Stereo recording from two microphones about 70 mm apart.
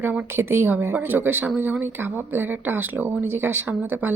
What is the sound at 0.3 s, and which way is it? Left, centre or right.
Speech, right.